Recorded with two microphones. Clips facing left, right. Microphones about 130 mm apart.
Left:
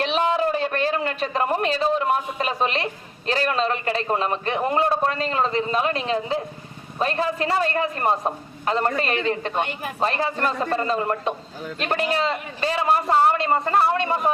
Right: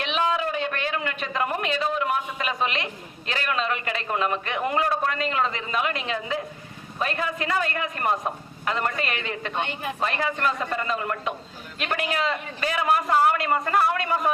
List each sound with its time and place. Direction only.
0.0 s a man's voice: 35° left (ahead or behind)